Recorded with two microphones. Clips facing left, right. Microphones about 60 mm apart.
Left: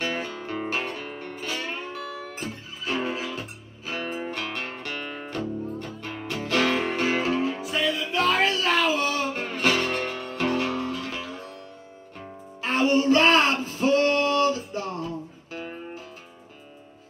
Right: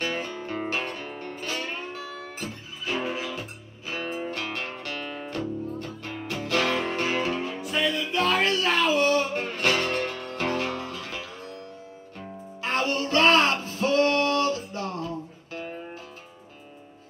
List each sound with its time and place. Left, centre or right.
0.0 s guitar: centre
1.2 s music: centre
12.9 s a sound: centre
13.2 s a sound: centre
13.6 s female singing: centre
14.7 s music: left